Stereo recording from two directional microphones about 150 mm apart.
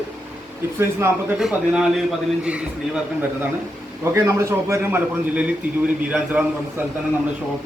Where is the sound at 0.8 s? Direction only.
15° right (ahead or behind).